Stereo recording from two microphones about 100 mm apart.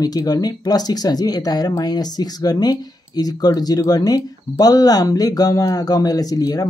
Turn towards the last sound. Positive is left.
turn(degrees=40)  # may be behind; listen again after turning